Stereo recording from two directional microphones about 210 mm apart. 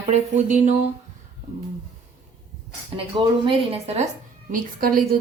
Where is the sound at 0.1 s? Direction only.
35° right (ahead or behind).